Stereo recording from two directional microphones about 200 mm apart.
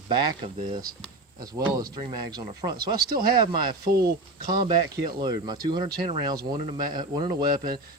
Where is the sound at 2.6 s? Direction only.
30° right (ahead or behind).